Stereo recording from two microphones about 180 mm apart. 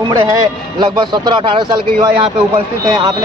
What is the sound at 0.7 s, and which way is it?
A man's voice, 25° right (ahead or behind).